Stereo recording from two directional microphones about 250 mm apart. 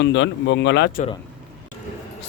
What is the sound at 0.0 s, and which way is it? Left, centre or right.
A man's voice, left.